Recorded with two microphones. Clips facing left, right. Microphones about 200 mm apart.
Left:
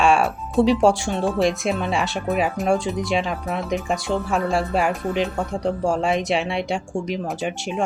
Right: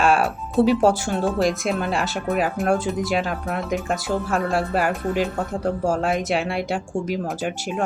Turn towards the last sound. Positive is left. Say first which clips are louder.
# even
turn(degrees=0)  # may be behind; listen again after turning